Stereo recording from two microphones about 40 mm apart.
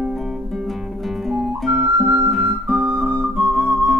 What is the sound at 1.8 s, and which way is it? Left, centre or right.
Music, right.